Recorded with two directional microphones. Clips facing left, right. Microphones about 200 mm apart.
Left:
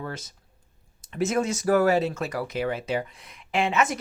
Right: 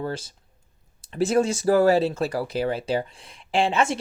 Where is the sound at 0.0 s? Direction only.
30° right (ahead or behind).